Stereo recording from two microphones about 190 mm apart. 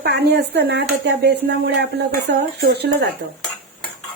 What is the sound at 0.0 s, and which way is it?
Speech, 60° right (ahead or behind).